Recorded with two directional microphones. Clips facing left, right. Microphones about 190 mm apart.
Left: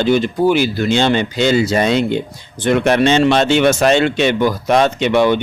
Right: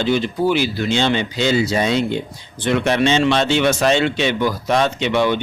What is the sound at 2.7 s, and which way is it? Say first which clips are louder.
Speech: left 4 dB; 50° left (ahead or behind).